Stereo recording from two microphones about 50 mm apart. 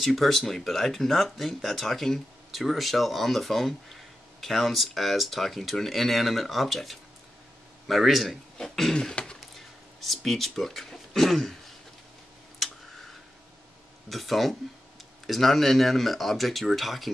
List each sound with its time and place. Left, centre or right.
0.0 s speech: centre
9.2 s a sound: left
9.9 s speech: centre
14.0 s speech: centre